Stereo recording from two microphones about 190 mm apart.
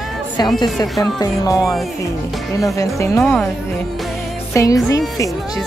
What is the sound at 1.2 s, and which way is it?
Speech, 20° left (ahead or behind).